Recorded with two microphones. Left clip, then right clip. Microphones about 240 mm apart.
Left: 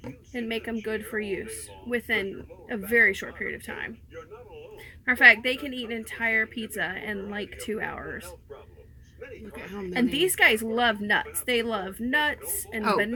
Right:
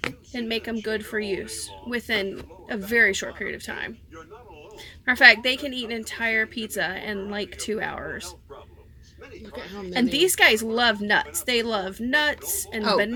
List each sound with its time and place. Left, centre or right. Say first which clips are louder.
0.3 s a woman's voice: right 2 dB; centre
5.0 s a woman's voice: right 2 dB; centre
9.6 s speech: right 3 dB; left
9.9 s a woman's voice: right 4 dB; centre